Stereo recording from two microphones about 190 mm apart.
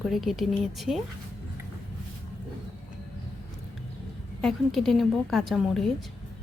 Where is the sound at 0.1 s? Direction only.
Centre (ahead or behind).